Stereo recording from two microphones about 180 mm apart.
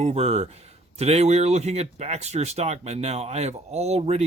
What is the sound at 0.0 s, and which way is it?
Speech, 35° right (ahead or behind).